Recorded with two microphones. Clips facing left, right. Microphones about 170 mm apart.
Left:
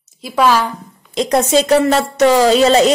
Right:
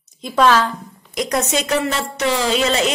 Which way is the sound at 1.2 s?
30° left (ahead or behind).